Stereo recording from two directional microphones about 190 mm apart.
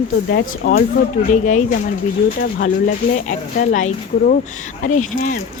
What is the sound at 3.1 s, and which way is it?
A woman's voice, 40° left (ahead or behind).